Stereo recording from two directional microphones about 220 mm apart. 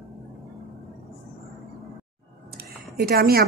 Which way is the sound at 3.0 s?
45° right (ahead or behind).